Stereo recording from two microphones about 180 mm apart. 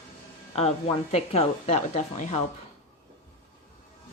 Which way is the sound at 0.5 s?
35° left (ahead or behind).